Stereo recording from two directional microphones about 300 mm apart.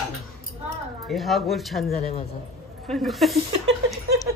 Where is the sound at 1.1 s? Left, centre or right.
Centre.